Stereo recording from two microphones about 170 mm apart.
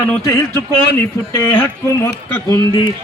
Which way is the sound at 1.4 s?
10° left (ahead or behind).